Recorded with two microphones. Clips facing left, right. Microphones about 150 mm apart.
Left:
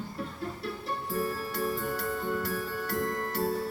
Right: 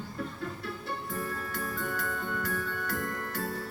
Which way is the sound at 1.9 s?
30° left (ahead or behind).